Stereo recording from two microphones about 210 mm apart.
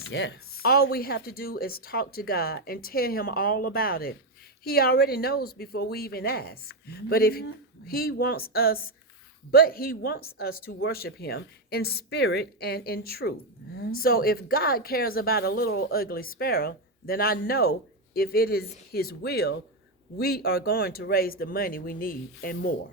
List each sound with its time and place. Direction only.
0.1 s speech: 55° left (ahead or behind)